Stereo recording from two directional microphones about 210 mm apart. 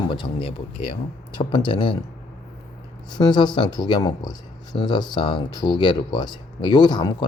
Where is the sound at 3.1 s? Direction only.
20° left (ahead or behind).